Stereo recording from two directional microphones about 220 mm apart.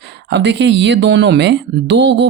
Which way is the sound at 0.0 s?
50° right (ahead or behind).